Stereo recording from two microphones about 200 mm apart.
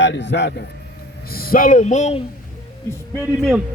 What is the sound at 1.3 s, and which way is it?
Speech, 45° left (ahead or behind).